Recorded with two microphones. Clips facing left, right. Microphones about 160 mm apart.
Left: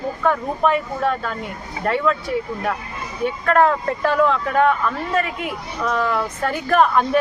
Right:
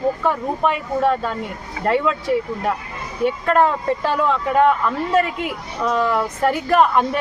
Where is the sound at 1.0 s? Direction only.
25° right (ahead or behind).